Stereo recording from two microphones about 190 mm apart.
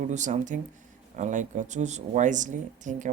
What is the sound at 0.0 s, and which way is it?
Speech, 40° right (ahead or behind).